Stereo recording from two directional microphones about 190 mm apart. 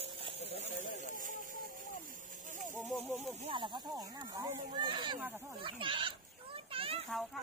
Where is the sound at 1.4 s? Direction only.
50° right (ahead or behind).